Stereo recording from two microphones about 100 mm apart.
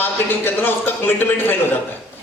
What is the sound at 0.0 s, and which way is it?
A man's voice, 20° left (ahead or behind).